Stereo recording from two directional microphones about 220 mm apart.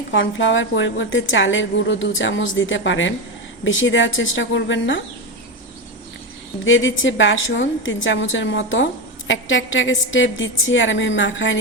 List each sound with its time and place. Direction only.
0.1 s a woman's voice: 55° left (ahead or behind)
6.7 s a woman's voice: 60° left (ahead or behind)